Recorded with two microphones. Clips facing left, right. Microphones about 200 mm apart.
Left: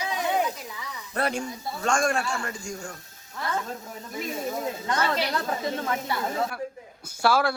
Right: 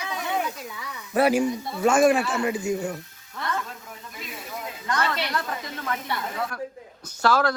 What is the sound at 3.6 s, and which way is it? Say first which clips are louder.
Speech: left 5 dB; 45° left (ahead or behind).